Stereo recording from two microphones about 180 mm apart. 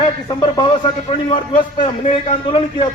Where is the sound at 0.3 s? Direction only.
25° left (ahead or behind).